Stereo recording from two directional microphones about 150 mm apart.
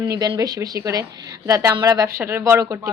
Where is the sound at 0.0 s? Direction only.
25° right (ahead or behind).